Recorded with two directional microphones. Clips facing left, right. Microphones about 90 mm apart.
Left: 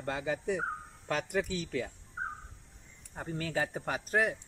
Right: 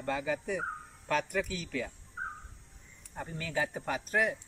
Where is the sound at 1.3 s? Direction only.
30° left (ahead or behind).